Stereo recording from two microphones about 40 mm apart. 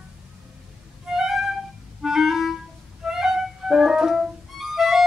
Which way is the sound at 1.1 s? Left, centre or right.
Centre.